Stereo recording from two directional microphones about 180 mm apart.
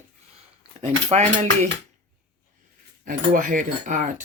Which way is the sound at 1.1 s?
35° right (ahead or behind).